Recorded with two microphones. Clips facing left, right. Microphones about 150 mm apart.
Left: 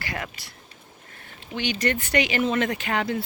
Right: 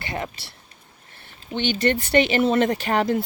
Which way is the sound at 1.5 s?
30° right (ahead or behind).